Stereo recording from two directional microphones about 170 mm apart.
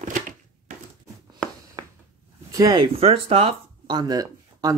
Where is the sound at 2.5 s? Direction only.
20° right (ahead or behind).